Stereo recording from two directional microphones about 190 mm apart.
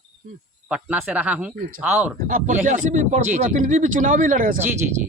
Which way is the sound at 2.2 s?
45° right (ahead or behind).